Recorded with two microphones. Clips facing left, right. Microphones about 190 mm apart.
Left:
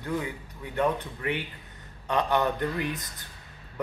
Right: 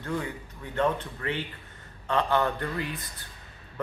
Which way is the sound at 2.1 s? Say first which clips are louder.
Even; 15° left (ahead or behind).